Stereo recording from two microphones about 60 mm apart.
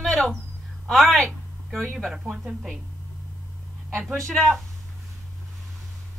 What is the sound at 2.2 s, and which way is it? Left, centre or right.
Speech, centre.